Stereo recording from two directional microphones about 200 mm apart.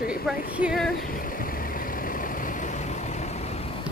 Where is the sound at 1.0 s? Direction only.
45° left (ahead or behind).